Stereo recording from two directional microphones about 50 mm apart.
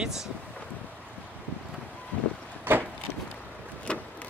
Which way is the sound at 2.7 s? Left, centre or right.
Right.